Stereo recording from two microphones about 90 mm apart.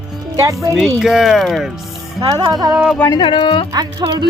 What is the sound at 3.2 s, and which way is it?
Speech, 65° left (ahead or behind).